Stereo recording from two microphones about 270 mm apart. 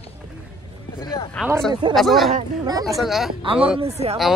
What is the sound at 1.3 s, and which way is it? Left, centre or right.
Speech, centre.